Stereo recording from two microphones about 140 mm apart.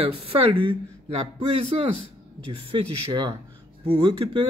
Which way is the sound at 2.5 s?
35° right (ahead or behind).